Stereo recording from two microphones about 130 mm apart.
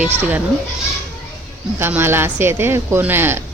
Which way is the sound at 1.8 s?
15° right (ahead or behind).